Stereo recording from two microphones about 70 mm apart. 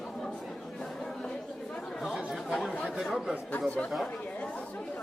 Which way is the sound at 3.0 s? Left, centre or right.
Centre.